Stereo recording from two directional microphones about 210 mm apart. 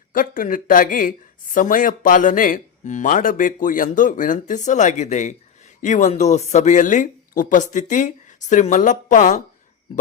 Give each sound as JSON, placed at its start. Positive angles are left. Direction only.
{"t": 0.1, "sound": "speech", "side_deg": 40}